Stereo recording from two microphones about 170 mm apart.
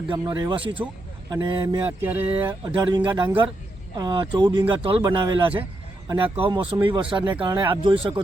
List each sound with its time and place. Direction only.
0.1 s speech: 25° right (ahead or behind)
2.6 s speech: 25° right (ahead or behind)